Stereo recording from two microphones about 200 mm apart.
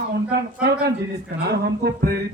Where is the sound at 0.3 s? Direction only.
50° right (ahead or behind).